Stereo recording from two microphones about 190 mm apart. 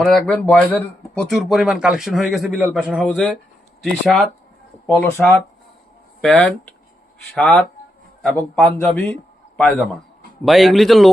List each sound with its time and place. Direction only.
0.0 s speech: 5° left (ahead or behind)